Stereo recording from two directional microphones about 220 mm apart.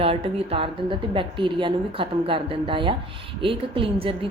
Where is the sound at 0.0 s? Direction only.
25° right (ahead or behind).